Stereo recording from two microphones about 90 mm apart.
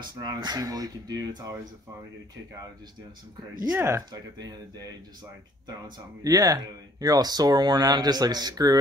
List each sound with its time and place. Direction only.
0.0 s speech: 50° right (ahead or behind)
3.7 s speech: 30° right (ahead or behind)
4.1 s speech: 45° right (ahead or behind)
6.2 s speech: 40° right (ahead or behind)